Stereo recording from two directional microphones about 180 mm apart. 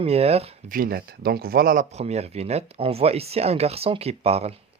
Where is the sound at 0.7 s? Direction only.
55° right (ahead or behind).